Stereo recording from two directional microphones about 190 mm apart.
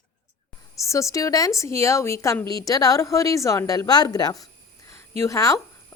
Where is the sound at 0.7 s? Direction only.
15° left (ahead or behind).